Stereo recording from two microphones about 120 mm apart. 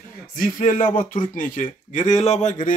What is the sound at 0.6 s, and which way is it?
Speech, 90° left.